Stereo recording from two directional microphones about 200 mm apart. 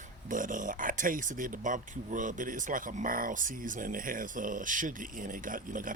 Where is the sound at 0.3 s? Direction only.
40° right (ahead or behind).